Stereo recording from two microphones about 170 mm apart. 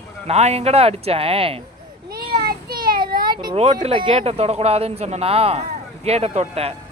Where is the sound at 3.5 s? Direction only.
35° right (ahead or behind).